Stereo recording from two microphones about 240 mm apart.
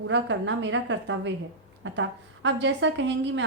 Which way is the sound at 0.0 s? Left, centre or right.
Right.